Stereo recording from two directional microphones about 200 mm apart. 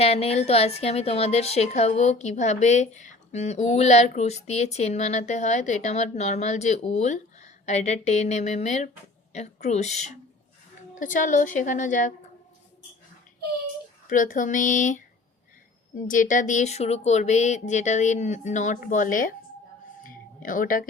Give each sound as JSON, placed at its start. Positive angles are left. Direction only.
{"t": 0.0, "sound": "a woman's voice", "side_deg": 30}
{"t": 14.1, "sound": "a woman's voice", "side_deg": 40}
{"t": 20.1, "sound": "a sound", "side_deg": 45}